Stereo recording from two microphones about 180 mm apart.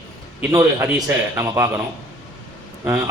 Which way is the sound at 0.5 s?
15° right (ahead or behind).